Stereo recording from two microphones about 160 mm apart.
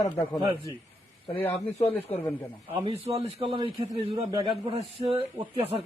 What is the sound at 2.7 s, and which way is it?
Speech, 35° right (ahead or behind).